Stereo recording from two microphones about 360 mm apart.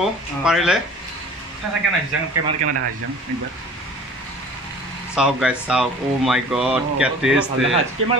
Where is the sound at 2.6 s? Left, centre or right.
Right.